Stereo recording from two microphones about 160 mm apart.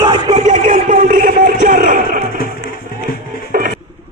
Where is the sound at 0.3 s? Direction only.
45° right (ahead or behind).